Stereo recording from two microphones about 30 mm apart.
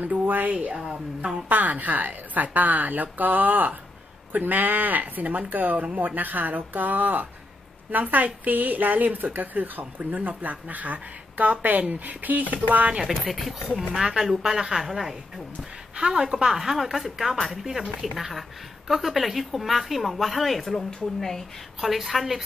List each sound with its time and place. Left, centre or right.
0.0 s a woman's voice: right
0.5 s a woman's voice: right
1.5 s a woman's voice: right
10.1 s speech: right
13.0 s a woman's voice: centre
13.9 s a woman's voice: centre
16.0 s a woman's voice: right
16.4 s a woman's voice: centre
20.7 s speech: centre
21.8 s a woman's voice: centre